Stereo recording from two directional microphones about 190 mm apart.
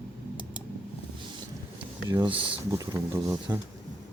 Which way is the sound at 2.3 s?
25° right (ahead or behind).